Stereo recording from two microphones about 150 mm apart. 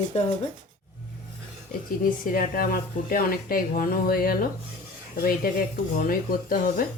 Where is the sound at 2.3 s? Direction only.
70° left (ahead or behind).